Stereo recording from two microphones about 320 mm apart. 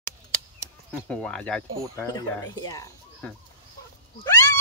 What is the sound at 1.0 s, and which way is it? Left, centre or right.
Speech, centre.